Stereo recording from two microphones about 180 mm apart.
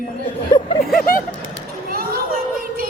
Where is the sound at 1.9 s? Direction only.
55° right (ahead or behind).